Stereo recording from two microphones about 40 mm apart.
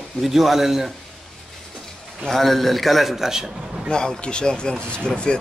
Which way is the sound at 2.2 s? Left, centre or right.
Centre.